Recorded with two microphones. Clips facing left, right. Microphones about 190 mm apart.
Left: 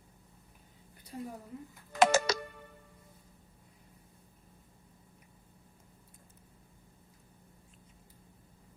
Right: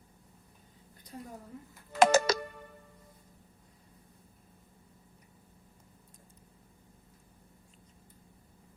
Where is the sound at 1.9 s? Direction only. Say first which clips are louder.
Right 2 dB; 40° right (ahead or behind).